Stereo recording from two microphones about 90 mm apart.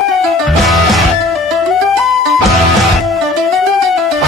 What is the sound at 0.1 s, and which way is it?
Music, centre (ahead or behind).